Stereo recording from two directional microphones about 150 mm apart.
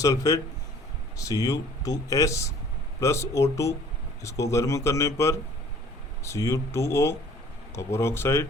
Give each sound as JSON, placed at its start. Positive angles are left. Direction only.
{"t": 0.0, "sound": "speech", "side_deg": 25}